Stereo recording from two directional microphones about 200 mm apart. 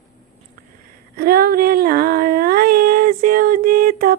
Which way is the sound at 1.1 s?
50° right (ahead or behind).